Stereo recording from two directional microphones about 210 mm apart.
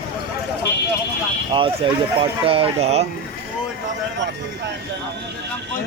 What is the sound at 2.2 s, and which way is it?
Speech, 25° right (ahead or behind).